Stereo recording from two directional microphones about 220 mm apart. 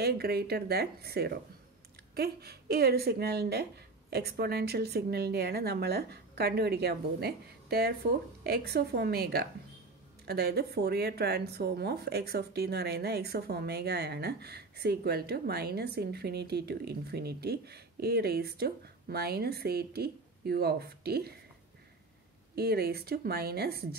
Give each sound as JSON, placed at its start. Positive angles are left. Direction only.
{"t": 0.0, "sound": "speech", "side_deg": -45}
{"t": 22.6, "sound": "speech", "side_deg": -45}